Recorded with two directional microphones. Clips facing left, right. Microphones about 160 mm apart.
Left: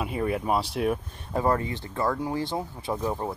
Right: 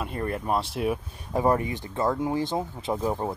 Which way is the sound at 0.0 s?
5° left (ahead or behind).